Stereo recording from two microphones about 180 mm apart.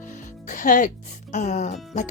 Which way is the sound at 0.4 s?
50° left (ahead or behind).